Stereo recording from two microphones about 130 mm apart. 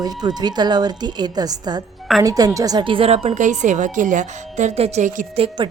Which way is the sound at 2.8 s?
45° right (ahead or behind).